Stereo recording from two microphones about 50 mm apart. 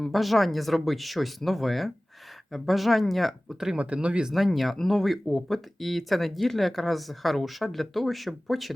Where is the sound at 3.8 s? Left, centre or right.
Right.